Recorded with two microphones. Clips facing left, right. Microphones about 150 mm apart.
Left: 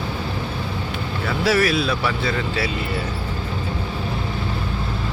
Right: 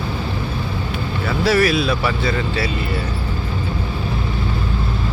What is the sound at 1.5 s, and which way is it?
Speech, centre (ahead or behind).